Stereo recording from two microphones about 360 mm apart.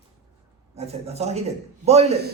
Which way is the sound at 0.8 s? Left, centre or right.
Centre.